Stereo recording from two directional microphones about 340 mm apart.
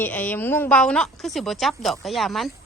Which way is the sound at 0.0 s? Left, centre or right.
Centre.